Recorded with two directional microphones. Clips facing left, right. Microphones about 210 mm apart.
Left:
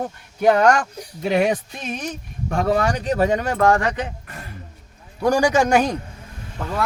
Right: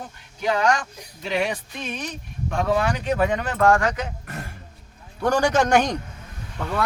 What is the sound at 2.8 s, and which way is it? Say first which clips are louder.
Speech: left 2 dB; 35° left (ahead or behind).